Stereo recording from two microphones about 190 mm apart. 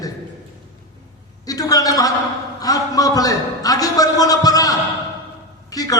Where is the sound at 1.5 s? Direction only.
20° left (ahead or behind).